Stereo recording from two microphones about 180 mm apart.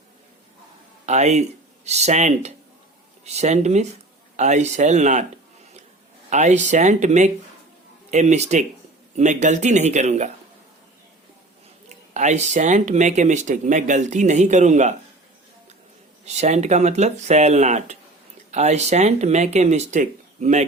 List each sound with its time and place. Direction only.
1.0 s speech: 40° right (ahead or behind)
6.3 s speech: 40° right (ahead or behind)
11.9 s speech: 40° right (ahead or behind)
16.2 s speech: 40° right (ahead or behind)